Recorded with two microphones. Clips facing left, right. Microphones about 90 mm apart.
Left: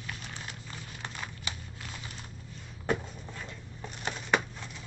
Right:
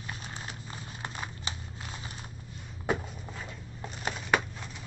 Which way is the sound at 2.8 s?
10° right (ahead or behind).